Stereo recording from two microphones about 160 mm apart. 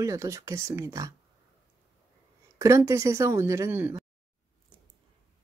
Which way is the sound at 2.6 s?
20° right (ahead or behind).